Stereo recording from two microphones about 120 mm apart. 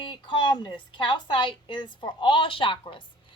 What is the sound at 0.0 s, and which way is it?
A woman's voice, 40° left (ahead or behind).